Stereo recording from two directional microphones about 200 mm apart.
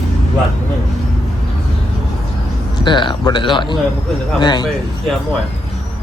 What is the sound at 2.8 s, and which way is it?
Speech, 25° left (ahead or behind).